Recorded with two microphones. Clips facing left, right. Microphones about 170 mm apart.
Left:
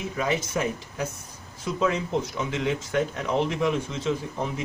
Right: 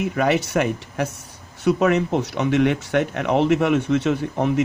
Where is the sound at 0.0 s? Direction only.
70° right (ahead or behind).